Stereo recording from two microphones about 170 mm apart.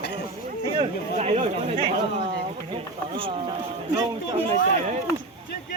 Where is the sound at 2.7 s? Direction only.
30° right (ahead or behind).